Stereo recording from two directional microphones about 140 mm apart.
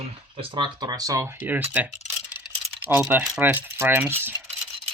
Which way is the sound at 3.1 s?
10° right (ahead or behind).